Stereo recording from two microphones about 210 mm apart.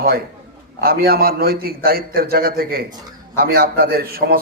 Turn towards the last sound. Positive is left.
turn(degrees=-45)  # may be behind; listen again after turning